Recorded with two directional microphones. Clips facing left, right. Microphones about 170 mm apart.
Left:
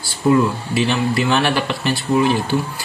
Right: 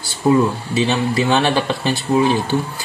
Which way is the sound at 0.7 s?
20° right (ahead or behind).